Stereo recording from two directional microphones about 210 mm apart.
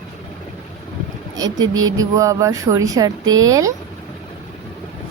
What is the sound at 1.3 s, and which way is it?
A woman's voice, 15° right (ahead or behind).